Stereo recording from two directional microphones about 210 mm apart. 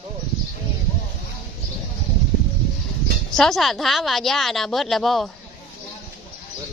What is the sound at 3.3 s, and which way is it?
A woman's voice, centre (ahead or behind).